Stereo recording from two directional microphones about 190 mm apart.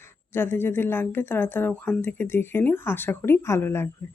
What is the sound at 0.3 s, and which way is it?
Speech, 10° left (ahead or behind).